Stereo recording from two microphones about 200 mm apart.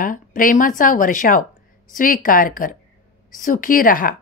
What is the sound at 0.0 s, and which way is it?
Speech, 45° left (ahead or behind).